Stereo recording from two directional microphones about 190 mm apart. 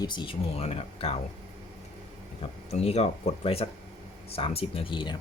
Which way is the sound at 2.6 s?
35° left (ahead or behind).